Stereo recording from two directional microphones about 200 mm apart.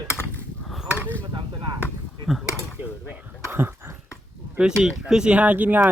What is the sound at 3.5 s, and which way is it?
Dog, 10° right (ahead or behind).